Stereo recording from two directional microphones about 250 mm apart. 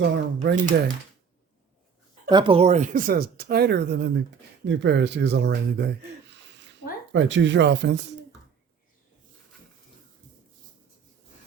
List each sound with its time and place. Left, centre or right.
0.0 s speech: right
2.3 s a man's voice: right